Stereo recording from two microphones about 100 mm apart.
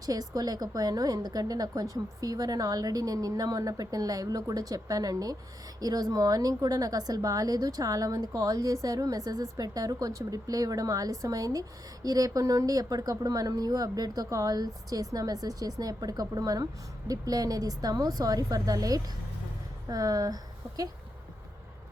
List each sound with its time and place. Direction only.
0.0 s a woman's voice: 40° right (ahead or behind)